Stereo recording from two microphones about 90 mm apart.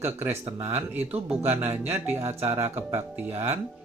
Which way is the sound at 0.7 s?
25° right (ahead or behind).